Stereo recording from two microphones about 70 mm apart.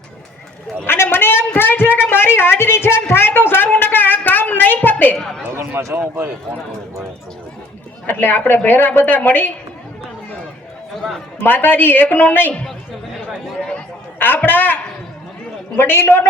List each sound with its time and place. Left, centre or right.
0.9 s a sound: left
5.1 s speech: centre
5.9 s speech: right
8.0 s a woman's voice: left
11.3 s a woman's voice: left
14.2 s a man's voice: left